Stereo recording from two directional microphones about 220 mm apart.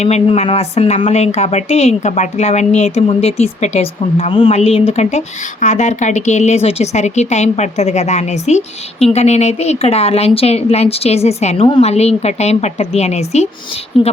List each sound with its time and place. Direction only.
0.0 s speech: 30° left (ahead or behind)